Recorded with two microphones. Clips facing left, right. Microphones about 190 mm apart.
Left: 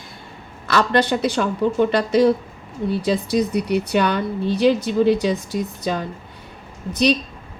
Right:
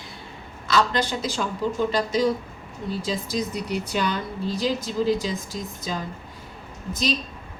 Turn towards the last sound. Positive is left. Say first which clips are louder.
# left 8 dB
turn(degrees=65)  # may be behind; listen again after turning